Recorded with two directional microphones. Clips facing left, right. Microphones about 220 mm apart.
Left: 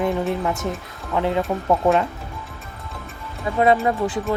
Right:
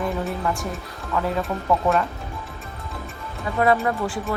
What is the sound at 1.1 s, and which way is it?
Speech, 20° left (ahead or behind).